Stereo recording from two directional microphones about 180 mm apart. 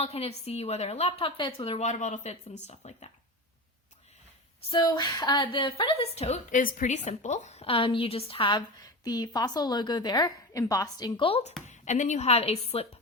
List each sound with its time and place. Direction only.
0.0 s a woman's voice: 35° left (ahead or behind)
4.7 s a woman's voice: 25° left (ahead or behind)